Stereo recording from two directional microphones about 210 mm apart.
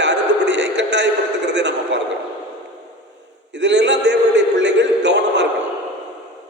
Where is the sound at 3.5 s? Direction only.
55° right (ahead or behind).